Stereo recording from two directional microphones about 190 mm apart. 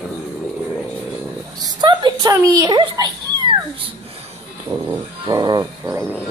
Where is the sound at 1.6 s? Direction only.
25° right (ahead or behind).